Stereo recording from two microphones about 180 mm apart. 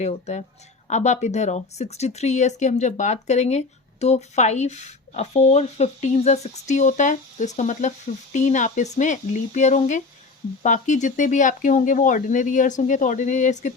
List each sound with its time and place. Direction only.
0.0 s speech: 40° left (ahead or behind)